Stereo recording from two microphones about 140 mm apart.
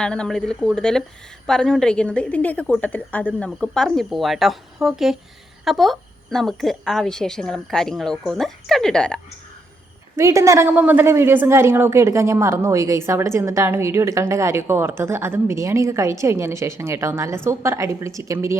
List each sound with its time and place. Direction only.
0.0 s a woman's voice: 5° left (ahead or behind)
10.2 s a woman's voice: 20° right (ahead or behind)